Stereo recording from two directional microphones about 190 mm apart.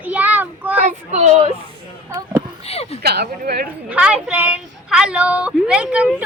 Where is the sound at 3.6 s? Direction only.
5° right (ahead or behind).